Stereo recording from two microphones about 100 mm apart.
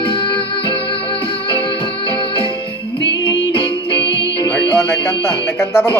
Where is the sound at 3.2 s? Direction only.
50° left (ahead or behind).